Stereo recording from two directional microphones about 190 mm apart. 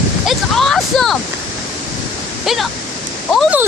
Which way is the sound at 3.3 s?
5° right (ahead or behind).